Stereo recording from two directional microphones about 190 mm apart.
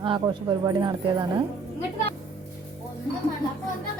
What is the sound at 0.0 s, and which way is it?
A woman's voice, 25° right (ahead or behind).